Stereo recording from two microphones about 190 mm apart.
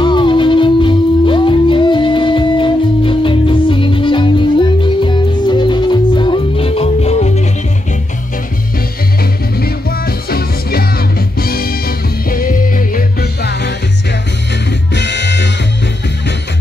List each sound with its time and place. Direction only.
0.0 s music: 25° left (ahead or behind)
9.6 s music: 55° left (ahead or behind)
15.0 s music: 65° left (ahead or behind)